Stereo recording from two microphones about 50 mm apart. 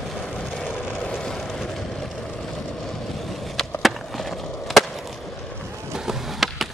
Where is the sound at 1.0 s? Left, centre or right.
Centre.